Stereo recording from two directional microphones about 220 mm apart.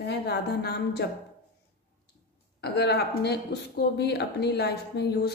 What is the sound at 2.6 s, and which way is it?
Speech, 50° left (ahead or behind).